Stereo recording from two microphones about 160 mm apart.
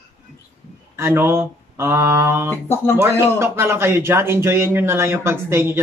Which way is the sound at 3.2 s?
15° right (ahead or behind).